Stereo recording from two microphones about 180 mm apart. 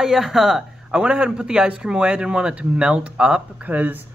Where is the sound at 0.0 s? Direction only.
Centre (ahead or behind).